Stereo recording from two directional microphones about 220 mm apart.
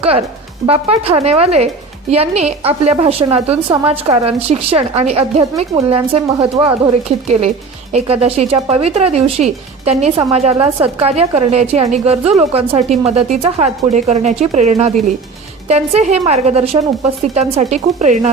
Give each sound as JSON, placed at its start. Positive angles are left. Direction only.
{"t": 0.0, "sound": "speech", "side_deg": -25}
{"t": 7.9, "sound": "speech", "side_deg": -25}